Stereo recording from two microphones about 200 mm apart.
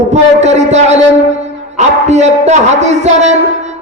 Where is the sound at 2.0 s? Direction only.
35° right (ahead or behind).